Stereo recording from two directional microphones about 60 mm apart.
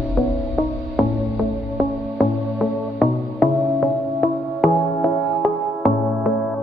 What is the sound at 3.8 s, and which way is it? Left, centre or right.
Music, centre.